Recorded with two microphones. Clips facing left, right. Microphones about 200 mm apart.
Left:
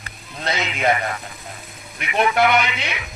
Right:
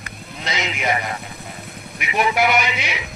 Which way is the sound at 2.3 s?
5° right (ahead or behind).